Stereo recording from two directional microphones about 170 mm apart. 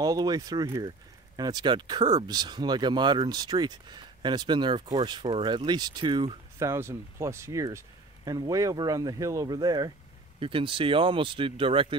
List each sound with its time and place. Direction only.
0.0 s speech: 20° right (ahead or behind)